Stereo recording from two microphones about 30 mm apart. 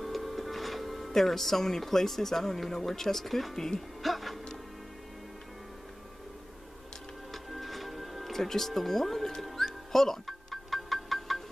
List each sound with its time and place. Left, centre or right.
0.0 s speech: centre
3.5 s speech: centre
4.0 s music: centre
7.4 s music: centre